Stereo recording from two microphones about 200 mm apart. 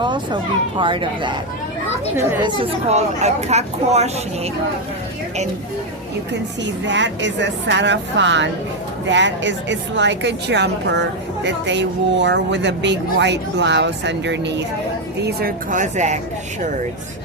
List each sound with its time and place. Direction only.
0.0 s speech: 25° right (ahead or behind)
2.1 s speech: 15° right (ahead or behind)
2.6 s speech: 35° right (ahead or behind)
6.8 s speech: 65° right (ahead or behind)
15.2 s speech: 50° right (ahead or behind)